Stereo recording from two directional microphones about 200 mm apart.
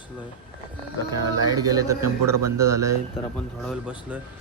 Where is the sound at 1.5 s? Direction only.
20° right (ahead or behind).